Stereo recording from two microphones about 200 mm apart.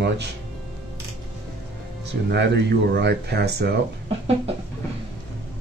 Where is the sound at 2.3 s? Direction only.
55° right (ahead or behind).